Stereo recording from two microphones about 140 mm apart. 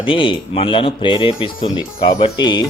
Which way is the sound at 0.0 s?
40° left (ahead or behind).